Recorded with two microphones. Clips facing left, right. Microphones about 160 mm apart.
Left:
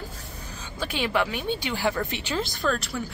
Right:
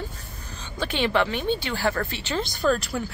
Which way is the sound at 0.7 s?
10° left (ahead or behind).